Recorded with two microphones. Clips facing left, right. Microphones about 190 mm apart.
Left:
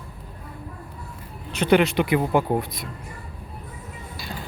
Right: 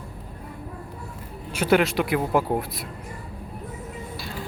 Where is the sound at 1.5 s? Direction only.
5° right (ahead or behind).